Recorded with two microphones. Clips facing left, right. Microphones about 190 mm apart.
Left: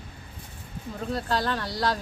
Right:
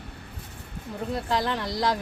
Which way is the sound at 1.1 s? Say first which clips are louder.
Even; 15° right (ahead or behind).